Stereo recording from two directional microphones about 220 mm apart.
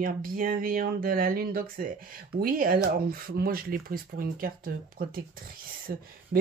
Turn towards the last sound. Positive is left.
turn(degrees=-40)  # may be behind; listen again after turning